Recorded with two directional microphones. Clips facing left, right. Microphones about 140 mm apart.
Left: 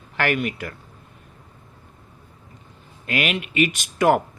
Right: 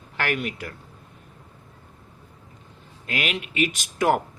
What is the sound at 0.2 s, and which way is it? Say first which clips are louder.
Speech: left 4 dB; 60° left (ahead or behind).